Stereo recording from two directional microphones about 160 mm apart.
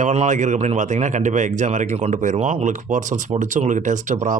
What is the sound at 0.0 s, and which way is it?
Speech, 50° right (ahead or behind).